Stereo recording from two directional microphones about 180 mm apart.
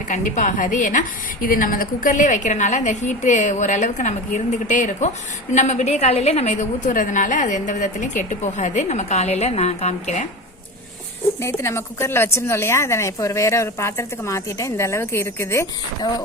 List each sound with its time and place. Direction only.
0.1 s a woman's voice: 45° left (ahead or behind)
11.4 s a woman's voice: 15° left (ahead or behind)